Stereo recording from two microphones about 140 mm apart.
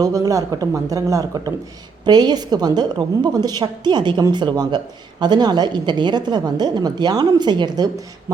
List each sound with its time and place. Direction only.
0.0 s a woman's voice: 25° right (ahead or behind)